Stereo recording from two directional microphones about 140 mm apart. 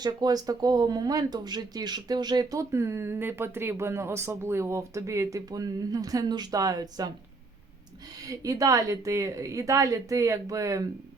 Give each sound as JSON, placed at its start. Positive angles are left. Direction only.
{"t": 0.0, "sound": "speech", "side_deg": -30}
{"t": 8.3, "sound": "speech", "side_deg": -25}